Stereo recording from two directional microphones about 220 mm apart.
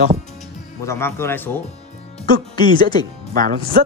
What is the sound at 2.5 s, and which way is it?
Speech, 20° left (ahead or behind).